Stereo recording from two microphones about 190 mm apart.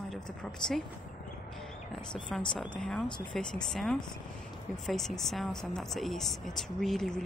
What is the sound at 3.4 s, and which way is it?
Speech, 5° left (ahead or behind).